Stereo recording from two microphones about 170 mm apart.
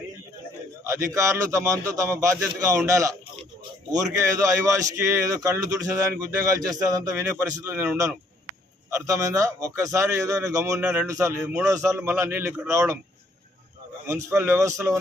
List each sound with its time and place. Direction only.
0.9 s a man's voice: 15° right (ahead or behind)
10.8 s a man's voice: 10° right (ahead or behind)
14.1 s a man's voice: 15° right (ahead or behind)